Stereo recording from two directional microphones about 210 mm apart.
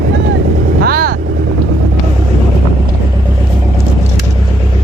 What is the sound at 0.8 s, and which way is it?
Vehicle, 45° right (ahead or behind).